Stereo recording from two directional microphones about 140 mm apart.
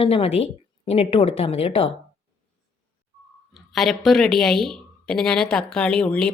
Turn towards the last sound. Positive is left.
turn(degrees=5)  # may be behind; listen again after turning